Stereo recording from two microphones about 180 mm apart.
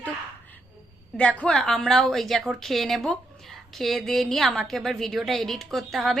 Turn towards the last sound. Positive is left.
turn(degrees=0)  # may be behind; listen again after turning